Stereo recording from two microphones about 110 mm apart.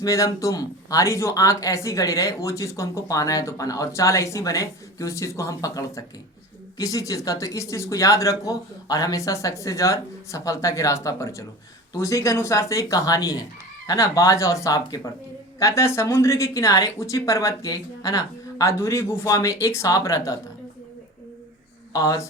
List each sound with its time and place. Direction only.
0.0 s speech: 30° left (ahead or behind)
21.9 s speech: 30° left (ahead or behind)